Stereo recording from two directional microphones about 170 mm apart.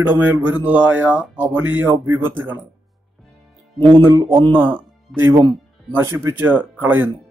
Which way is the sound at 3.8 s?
30° right (ahead or behind).